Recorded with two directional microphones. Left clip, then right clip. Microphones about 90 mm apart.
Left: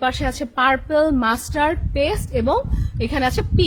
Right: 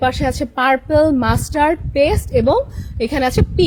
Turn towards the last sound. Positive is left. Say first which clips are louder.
# right 4 dB
turn(degrees=-45)  # may be behind; listen again after turning